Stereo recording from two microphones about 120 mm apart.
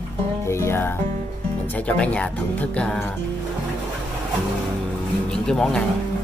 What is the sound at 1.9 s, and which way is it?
Speech, 10° left (ahead or behind).